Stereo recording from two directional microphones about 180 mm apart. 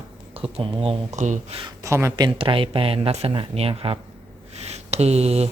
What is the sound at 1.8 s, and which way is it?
Speech, 15° right (ahead or behind).